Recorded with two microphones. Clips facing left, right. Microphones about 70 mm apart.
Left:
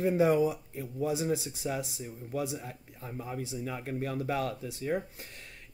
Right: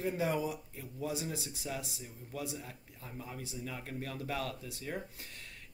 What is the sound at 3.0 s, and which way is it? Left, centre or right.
Speech, left.